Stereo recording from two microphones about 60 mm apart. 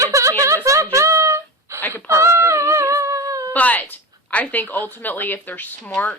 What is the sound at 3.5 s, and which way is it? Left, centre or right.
Speech, left.